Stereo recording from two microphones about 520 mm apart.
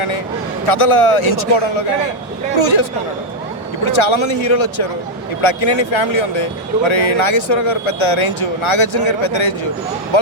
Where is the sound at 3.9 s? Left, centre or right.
Left.